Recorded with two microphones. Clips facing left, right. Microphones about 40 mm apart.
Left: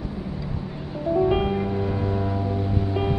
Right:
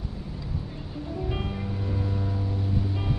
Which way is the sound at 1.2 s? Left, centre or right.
Left.